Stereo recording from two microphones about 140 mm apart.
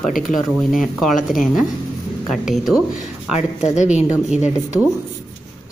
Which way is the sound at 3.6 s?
55° left (ahead or behind).